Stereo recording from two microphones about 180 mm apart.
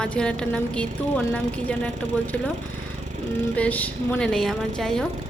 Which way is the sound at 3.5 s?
10° left (ahead or behind).